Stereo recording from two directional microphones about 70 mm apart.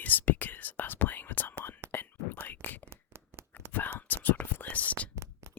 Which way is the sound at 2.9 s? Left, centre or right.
Right.